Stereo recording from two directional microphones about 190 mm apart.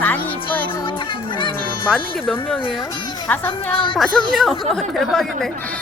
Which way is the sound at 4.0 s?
Centre (ahead or behind).